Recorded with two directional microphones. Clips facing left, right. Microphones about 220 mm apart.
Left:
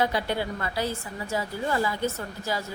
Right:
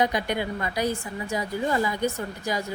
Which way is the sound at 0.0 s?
15° right (ahead or behind).